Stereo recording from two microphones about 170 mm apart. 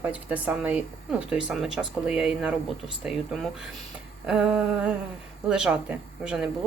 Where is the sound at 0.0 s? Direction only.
10° right (ahead or behind).